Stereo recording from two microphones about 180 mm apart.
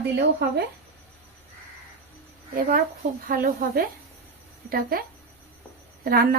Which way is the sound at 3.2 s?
55° right (ahead or behind).